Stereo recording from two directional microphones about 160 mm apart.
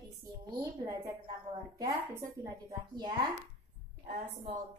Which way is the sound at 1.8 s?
15° right (ahead or behind).